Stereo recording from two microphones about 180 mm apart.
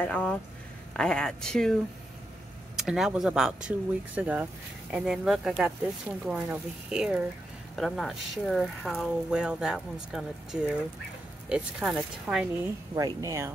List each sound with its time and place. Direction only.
0.0 s speech: 10° left (ahead or behind)
2.8 s speech: 5° right (ahead or behind)
12.9 s speech: 20° right (ahead or behind)